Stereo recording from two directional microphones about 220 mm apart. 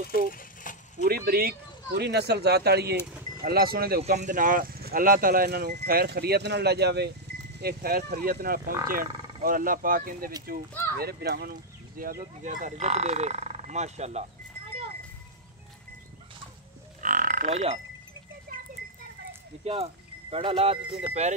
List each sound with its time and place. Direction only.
0.3 s coin: 40° left (ahead or behind)
1.0 s speech: 45° right (ahead or behind)
17.0 s frog: 35° right (ahead or behind)
18.5 s a sound: 40° right (ahead or behind)
19.6 s speech: 25° right (ahead or behind)